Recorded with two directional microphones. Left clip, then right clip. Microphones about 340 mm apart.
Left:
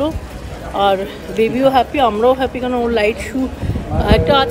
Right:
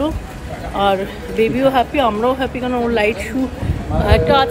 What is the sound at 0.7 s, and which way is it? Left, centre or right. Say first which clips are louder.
Speech: left 2 dB; centre.